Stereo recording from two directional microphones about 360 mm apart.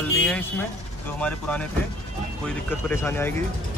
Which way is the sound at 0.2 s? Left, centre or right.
Centre.